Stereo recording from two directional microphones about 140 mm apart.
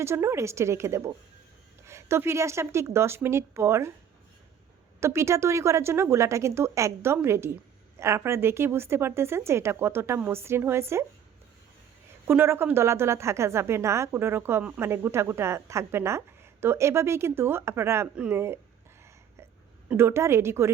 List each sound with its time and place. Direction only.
0.0 s a woman's voice: 20° right (ahead or behind)
4.9 s a woman's voice: 20° right (ahead or behind)
12.3 s a woman's voice: 15° right (ahead or behind)
19.9 s a woman's voice: 15° right (ahead or behind)